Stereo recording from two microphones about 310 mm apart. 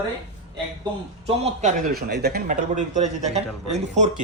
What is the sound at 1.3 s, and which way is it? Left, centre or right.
Speech, centre.